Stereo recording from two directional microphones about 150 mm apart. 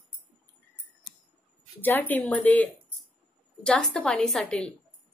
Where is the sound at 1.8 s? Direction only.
10° left (ahead or behind).